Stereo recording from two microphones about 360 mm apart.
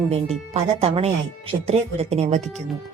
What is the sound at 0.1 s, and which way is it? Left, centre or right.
A woman's voice, centre.